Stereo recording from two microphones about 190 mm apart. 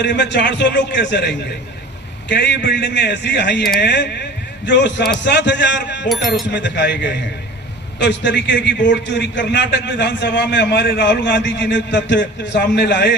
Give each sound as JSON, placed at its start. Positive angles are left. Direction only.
{"t": 0.0, "sound": "a man's voice", "side_deg": 65}